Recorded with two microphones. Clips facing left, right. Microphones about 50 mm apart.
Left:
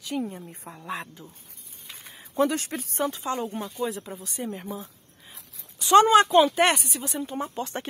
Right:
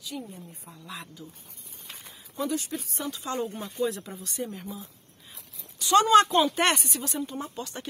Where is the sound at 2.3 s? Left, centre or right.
Left.